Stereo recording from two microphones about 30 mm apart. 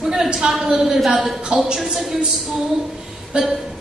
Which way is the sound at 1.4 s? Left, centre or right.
Right.